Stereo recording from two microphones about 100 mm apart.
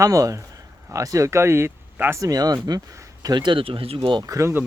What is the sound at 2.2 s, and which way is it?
Speech, 40° right (ahead or behind).